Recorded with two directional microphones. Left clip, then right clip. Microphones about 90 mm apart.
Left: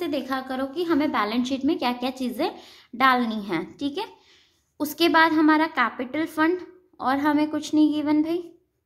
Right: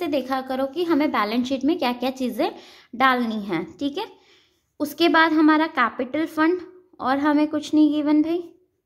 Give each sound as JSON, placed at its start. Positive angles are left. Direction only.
{"t": 0.0, "sound": "a woman's voice", "side_deg": -45}